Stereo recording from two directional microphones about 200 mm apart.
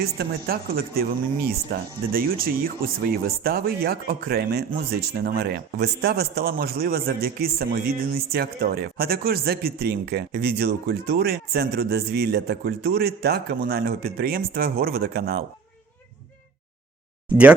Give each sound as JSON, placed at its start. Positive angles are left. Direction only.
{"t": 0.0, "sound": "speech", "side_deg": -50}